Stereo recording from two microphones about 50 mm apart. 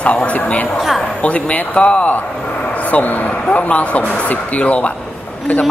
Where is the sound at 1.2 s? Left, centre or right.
Left.